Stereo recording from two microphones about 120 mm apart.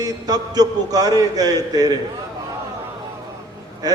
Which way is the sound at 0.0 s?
35° right (ahead or behind).